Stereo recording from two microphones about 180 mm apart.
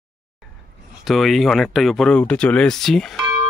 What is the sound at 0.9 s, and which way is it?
Speech, centre (ahead or behind).